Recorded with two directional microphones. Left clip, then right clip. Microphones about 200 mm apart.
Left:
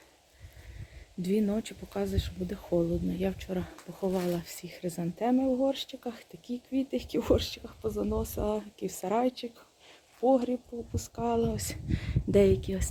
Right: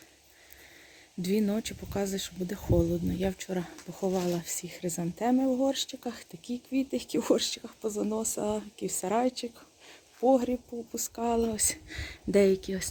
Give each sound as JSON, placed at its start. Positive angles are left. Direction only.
{"t": 1.2, "sound": "speech", "side_deg": -15}